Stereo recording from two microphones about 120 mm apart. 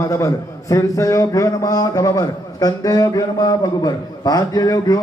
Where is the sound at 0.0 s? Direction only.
25° left (ahead or behind).